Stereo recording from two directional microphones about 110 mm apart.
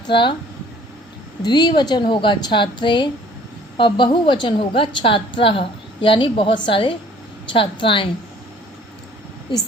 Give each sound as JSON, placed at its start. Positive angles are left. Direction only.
{"t": 0.1, "sound": "a woman's voice", "side_deg": 45}
{"t": 1.4, "sound": "a woman's voice", "side_deg": 40}